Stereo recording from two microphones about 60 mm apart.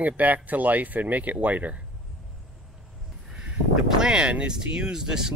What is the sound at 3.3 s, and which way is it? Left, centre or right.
Speech, centre.